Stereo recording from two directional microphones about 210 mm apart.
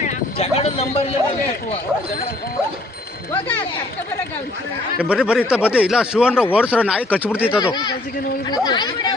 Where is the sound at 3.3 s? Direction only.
10° left (ahead or behind).